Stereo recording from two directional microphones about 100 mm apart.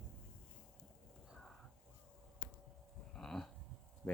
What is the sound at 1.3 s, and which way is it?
Crow, 5° left (ahead or behind).